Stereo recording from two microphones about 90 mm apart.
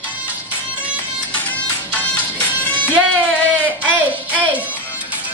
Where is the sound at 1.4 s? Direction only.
20° left (ahead or behind).